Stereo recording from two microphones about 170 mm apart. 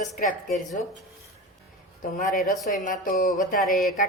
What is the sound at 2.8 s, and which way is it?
Speech, 55° left (ahead or behind).